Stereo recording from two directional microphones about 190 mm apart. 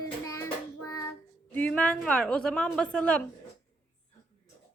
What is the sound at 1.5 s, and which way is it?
A woman's voice, 5° left (ahead or behind).